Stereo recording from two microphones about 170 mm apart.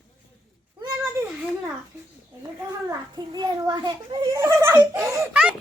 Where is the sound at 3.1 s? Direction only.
25° right (ahead or behind).